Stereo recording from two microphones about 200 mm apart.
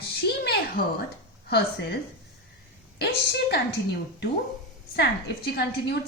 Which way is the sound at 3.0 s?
55° left (ahead or behind).